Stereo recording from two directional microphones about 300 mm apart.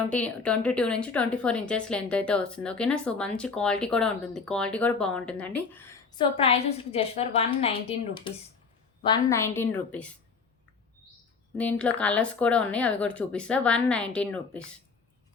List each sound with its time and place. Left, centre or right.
0.1 s speech: centre
6.3 s a woman's voice: centre
11.5 s speech: centre